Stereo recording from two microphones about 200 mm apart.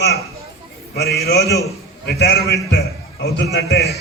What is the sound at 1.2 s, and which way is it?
A man's voice, 50° left (ahead or behind).